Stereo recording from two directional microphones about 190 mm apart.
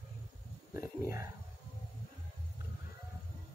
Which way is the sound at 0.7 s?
15° right (ahead or behind).